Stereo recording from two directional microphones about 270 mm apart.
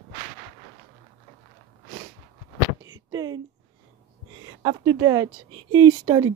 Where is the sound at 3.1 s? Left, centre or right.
Centre.